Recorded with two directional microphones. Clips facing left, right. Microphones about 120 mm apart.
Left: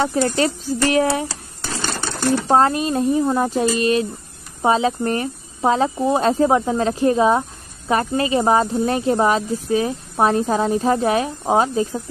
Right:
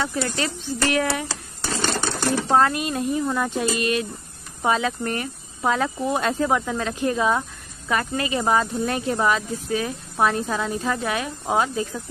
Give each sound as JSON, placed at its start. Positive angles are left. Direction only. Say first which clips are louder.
{"t": 0.0, "sound": "speech", "louder": "left 7 dB", "side_deg": 35}
{"t": 2.4, "sound": "speech", "louder": "left 3 dB", "side_deg": 30}